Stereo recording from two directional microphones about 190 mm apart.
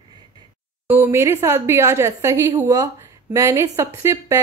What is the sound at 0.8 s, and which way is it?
Speech, 10° right (ahead or behind).